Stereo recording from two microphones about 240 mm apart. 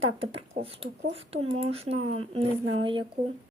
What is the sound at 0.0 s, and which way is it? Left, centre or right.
A woman's voice, right.